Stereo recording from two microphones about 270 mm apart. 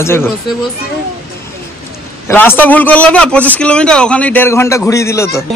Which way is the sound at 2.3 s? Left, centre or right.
Centre.